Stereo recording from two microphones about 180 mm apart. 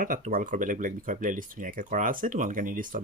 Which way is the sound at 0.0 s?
50° right (ahead or behind).